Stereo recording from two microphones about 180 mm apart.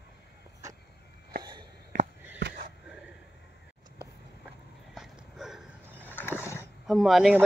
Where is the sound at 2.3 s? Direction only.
70° right (ahead or behind).